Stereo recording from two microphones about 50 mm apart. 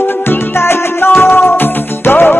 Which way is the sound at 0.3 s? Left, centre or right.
Left.